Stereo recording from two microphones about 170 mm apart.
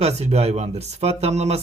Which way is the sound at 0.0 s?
40° right (ahead or behind).